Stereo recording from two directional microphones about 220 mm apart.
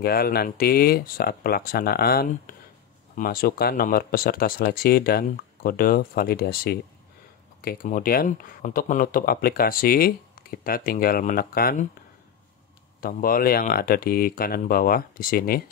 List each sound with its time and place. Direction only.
0.0 s speech: 45° left (ahead or behind)
13.0 s speech: 40° left (ahead or behind)